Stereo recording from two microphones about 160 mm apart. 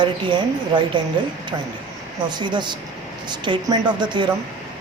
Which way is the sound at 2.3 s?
30° right (ahead or behind).